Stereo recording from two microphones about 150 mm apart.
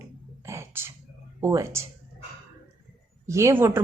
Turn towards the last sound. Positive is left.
turn(degrees=-15)  # may be behind; listen again after turning